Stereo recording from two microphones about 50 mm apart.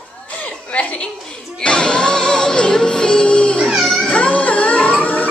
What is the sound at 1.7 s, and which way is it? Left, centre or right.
Music, centre.